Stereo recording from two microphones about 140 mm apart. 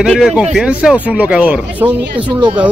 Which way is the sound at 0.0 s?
5° right (ahead or behind).